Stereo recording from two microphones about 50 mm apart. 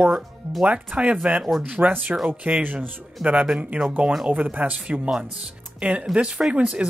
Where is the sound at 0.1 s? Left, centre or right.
Centre.